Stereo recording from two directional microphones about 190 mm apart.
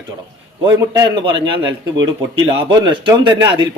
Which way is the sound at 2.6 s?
25° right (ahead or behind).